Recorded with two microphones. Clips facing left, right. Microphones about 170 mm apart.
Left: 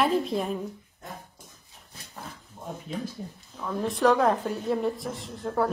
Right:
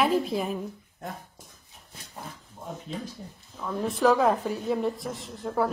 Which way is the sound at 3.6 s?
Centre (ahead or behind).